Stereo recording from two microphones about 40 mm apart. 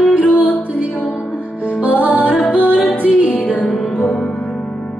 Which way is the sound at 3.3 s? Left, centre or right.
Left.